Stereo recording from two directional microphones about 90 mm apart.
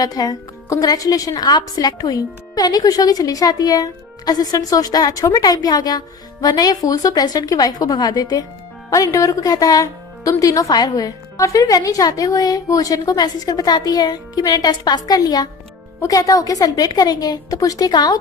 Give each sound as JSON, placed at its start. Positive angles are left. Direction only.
{"t": 0.0, "sound": "a woman's voice", "side_deg": 45}